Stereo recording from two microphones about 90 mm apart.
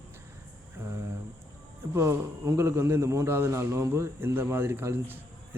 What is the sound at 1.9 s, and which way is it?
A man's voice, 30° right (ahead or behind).